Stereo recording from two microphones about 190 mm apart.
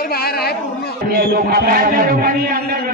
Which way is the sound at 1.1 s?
50° right (ahead or behind).